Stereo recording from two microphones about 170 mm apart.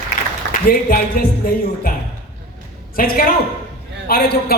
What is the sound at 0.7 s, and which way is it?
Speech, 60° left (ahead or behind).